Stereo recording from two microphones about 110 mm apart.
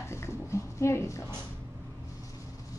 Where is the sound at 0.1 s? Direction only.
25° left (ahead or behind).